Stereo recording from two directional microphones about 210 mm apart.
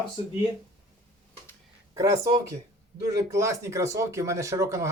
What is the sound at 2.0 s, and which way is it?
Speech, 15° right (ahead or behind).